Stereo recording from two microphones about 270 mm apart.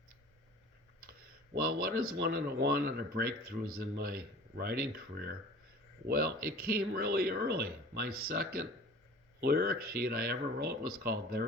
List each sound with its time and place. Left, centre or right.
1.5 s speech: right